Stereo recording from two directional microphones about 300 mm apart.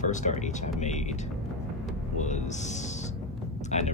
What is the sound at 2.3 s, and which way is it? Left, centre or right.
Speech, left.